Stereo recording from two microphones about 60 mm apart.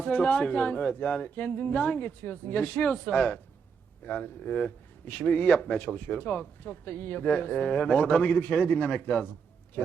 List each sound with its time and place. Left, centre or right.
0.0 s speech: left